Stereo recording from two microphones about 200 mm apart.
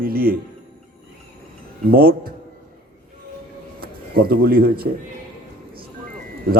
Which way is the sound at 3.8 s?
50° right (ahead or behind).